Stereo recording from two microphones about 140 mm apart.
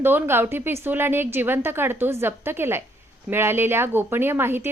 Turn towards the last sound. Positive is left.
turn(degrees=-15)  # may be behind; listen again after turning